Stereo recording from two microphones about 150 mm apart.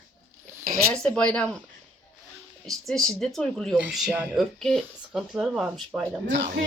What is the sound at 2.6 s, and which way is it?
Speech, 5° left (ahead or behind).